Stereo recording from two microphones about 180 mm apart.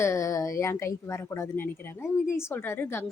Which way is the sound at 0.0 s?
15° left (ahead or behind).